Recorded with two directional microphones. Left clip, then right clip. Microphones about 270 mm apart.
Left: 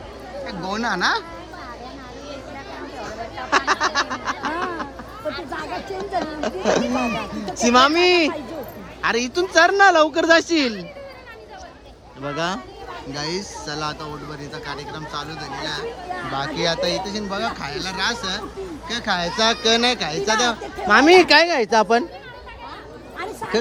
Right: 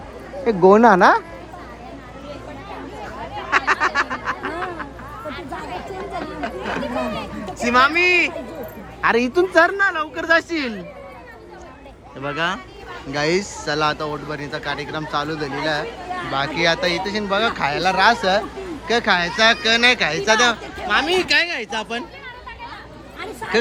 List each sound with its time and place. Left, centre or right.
0.4 s a woman's voice: centre
3.5 s duck: centre
7.6 s speech: centre
9.0 s a woman's voice: centre
9.7 s speech: centre
12.2 s speech: centre
16.3 s speech: centre
21.0 s speech: left
23.4 s a woman's voice: centre